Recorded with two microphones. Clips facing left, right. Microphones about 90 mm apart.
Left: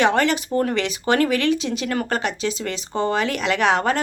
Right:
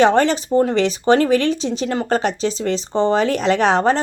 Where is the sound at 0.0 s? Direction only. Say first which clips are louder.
Right 4 dB; 35° right (ahead or behind).